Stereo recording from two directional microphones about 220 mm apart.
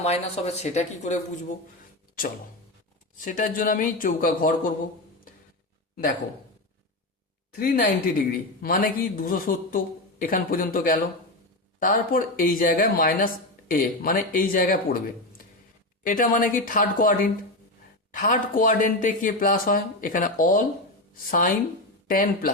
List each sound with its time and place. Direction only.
0.0 s speech: 30° left (ahead or behind)
3.2 s speech: 35° left (ahead or behind)
7.5 s speech: 40° left (ahead or behind)
16.0 s speech: 40° left (ahead or behind)